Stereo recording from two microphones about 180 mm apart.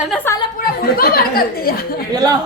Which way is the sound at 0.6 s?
55° left (ahead or behind).